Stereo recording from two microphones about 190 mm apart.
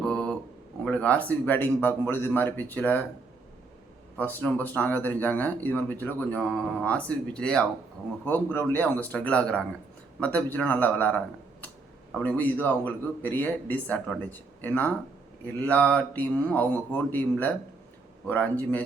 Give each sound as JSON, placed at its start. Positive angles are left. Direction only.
{"t": 0.0, "sound": "a sound", "side_deg": 5}
{"t": 0.9, "sound": "speech", "side_deg": 5}
{"t": 4.2, "sound": "speech", "side_deg": 10}